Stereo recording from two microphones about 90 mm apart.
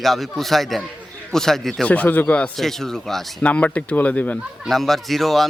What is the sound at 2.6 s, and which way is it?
Speech, 5° left (ahead or behind).